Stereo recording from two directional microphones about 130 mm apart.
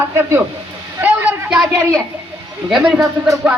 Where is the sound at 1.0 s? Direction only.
15° right (ahead or behind).